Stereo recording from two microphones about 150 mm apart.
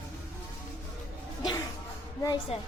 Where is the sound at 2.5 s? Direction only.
40° left (ahead or behind).